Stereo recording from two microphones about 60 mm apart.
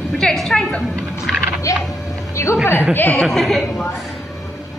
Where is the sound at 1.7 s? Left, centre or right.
Left.